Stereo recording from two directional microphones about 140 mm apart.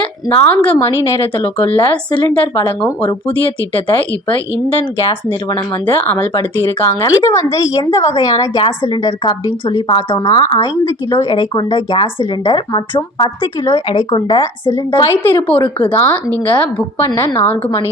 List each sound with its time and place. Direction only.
0.4 s a woman's voice: 10° left (ahead or behind)
1.4 s speech: 40° left (ahead or behind)
3.4 s speech: 40° left (ahead or behind)
6.0 s a woman's voice: 10° left (ahead or behind); by 15.1 s 30° left (ahead or behind)
15.1 s a woman's voice: 15° left (ahead or behind)